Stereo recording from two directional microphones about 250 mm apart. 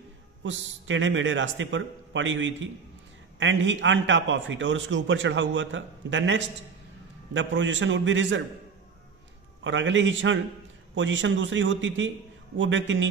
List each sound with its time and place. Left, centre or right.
0.4 s a man's voice: right
9.6 s a man's voice: right